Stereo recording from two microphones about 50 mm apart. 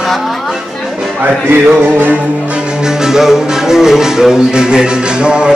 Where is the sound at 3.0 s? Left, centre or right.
Centre.